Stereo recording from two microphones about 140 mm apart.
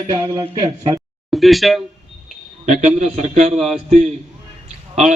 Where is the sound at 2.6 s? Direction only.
55° right (ahead or behind).